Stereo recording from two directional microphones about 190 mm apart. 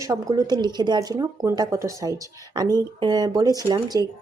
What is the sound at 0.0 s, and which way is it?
Speech, 20° right (ahead or behind).